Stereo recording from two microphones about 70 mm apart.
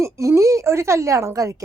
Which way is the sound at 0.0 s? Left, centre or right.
Right.